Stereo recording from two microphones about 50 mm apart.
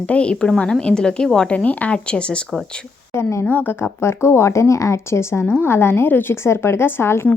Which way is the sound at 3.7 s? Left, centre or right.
Left.